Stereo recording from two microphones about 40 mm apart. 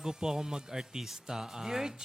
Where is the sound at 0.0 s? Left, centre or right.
Centre.